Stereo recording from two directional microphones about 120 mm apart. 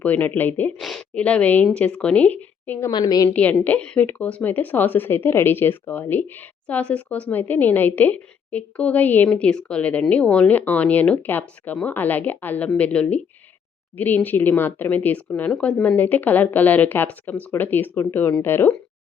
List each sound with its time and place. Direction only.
0.0 s speech: 15° left (ahead or behind)
0.8 s speech: 5° left (ahead or behind)
2.9 s a woman's voice: 30° left (ahead or behind)
3.2 s speech: 10° left (ahead or behind)